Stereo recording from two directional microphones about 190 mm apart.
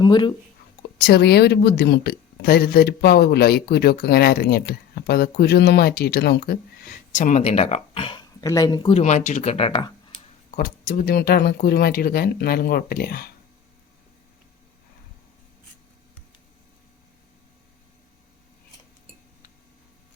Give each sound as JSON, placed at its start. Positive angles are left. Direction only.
{"t": 0.0, "sound": "speech", "side_deg": 25}
{"t": 0.8, "sound": "speech", "side_deg": 60}
{"t": 10.5, "sound": "speech", "side_deg": 45}